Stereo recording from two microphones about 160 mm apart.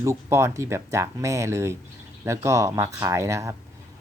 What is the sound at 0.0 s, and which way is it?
Speech, 15° right (ahead or behind).